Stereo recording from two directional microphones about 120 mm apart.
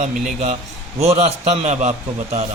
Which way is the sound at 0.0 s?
90° right.